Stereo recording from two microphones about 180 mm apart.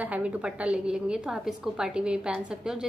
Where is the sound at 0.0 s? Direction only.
5° right (ahead or behind).